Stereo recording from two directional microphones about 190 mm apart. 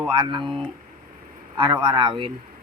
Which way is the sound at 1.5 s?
25° right (ahead or behind).